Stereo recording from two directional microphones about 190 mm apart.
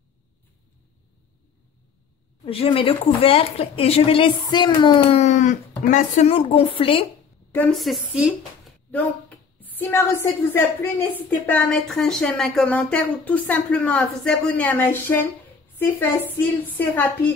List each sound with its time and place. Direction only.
2.4 s speech: 30° left (ahead or behind)
7.5 s a woman's voice: 5° left (ahead or behind)
8.9 s a woman's voice: 10° left (ahead or behind)